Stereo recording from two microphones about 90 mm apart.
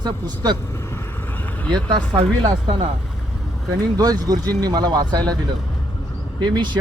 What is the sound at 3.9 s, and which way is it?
Speech, 45° right (ahead or behind).